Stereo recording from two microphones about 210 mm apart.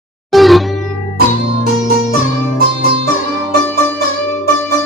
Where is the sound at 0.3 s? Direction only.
Centre (ahead or behind).